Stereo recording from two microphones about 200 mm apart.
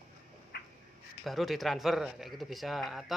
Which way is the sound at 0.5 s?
55° left (ahead or behind).